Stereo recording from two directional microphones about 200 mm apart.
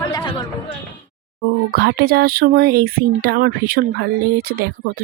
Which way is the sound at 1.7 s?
50° right (ahead or behind).